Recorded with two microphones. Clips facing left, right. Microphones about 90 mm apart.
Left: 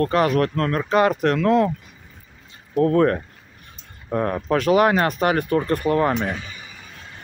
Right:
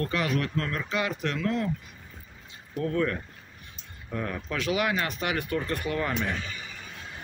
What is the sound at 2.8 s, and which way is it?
Speech, 50° left (ahead or behind).